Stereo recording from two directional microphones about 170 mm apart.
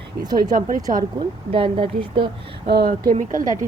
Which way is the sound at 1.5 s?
30° right (ahead or behind).